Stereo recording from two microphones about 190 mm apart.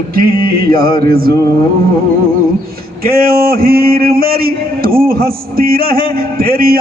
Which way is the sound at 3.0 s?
50° right (ahead or behind).